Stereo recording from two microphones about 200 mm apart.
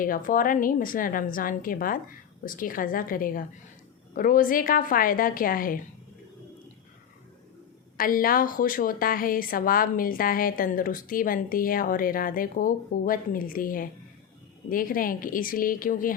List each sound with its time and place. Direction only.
0.0 s a woman's voice: 45° left (ahead or behind)
7.9 s a woman's voice: 45° left (ahead or behind)